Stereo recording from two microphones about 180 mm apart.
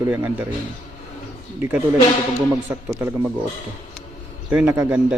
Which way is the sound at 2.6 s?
10° right (ahead or behind).